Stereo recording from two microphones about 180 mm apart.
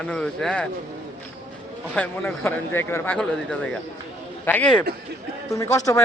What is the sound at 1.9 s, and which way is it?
A man's voice, 5° left (ahead or behind).